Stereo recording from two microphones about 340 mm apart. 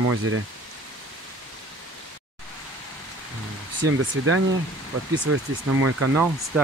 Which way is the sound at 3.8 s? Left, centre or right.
Right.